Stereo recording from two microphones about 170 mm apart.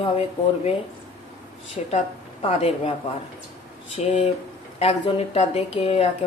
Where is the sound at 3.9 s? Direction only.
40° left (ahead or behind).